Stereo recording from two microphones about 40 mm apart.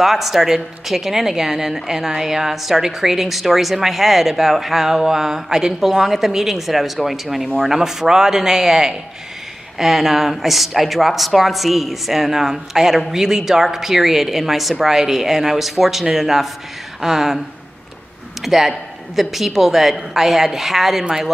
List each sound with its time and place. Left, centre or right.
0.0 s speech: centre
18.4 s speech: centre